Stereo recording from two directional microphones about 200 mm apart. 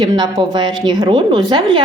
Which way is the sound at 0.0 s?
20° right (ahead or behind).